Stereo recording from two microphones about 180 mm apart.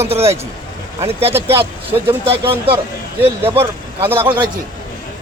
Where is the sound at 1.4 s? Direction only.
30° right (ahead or behind).